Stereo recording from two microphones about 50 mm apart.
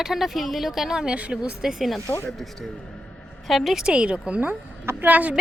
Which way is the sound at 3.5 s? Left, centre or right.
Centre.